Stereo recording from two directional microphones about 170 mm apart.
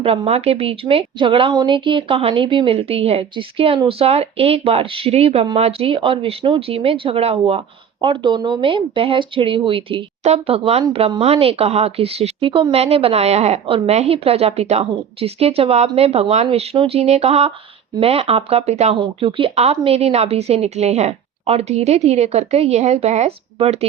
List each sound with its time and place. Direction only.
0.0 s a woman's voice: 35° right (ahead or behind)